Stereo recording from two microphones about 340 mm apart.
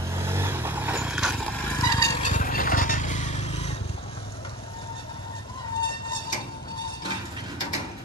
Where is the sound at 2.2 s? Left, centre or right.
Left.